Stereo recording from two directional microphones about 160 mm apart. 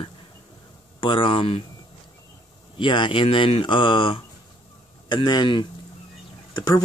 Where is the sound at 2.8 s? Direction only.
30° left (ahead or behind).